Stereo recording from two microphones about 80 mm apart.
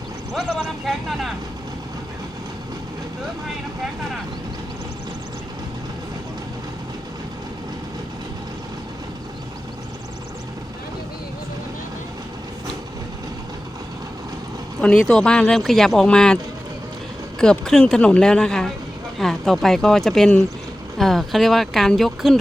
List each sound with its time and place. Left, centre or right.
0.9 s vehicle: centre
14.8 s speech: centre
17.4 s speech: centre